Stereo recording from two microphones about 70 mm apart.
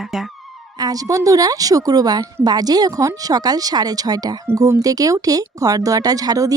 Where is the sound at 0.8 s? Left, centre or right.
Right.